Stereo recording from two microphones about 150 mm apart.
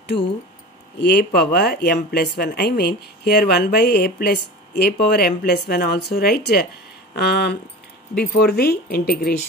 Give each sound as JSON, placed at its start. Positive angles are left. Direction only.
{"t": 1.0, "sound": "speech", "side_deg": 90}